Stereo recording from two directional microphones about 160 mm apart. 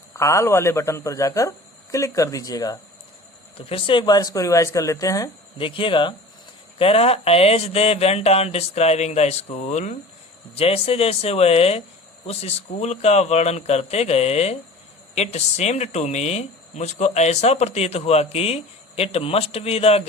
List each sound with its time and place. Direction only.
0.2 s speech: 20° left (ahead or behind)
3.7 s speech: 35° left (ahead or behind)
5.5 s speech: 35° left (ahead or behind)